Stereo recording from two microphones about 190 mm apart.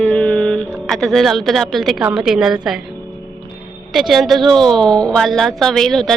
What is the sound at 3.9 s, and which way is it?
A woman's voice, centre (ahead or behind).